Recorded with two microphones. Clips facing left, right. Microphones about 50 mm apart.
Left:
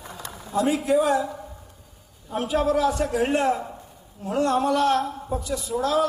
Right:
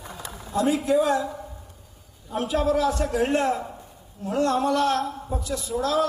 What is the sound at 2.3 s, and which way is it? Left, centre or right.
A man's voice, centre.